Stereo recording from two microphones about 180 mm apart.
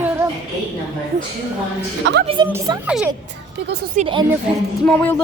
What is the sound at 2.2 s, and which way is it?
Speech, 30° right (ahead or behind).